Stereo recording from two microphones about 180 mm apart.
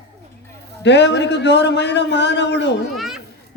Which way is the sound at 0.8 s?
75° left (ahead or behind).